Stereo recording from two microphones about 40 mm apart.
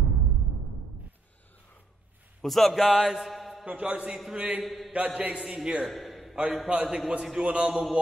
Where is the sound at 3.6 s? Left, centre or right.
Right.